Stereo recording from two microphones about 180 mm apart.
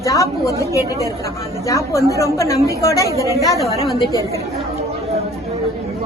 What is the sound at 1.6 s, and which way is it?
A woman's voice, 15° left (ahead or behind).